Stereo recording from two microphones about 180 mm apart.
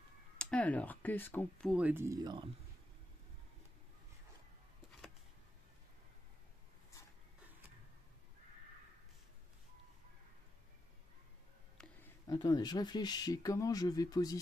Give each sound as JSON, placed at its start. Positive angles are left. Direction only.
{"t": 0.4, "sound": "speech", "side_deg": 5}
{"t": 1.7, "sound": "speech", "side_deg": -5}
{"t": 11.8, "sound": "a sound", "side_deg": 5}
{"t": 12.3, "sound": "speech", "side_deg": 25}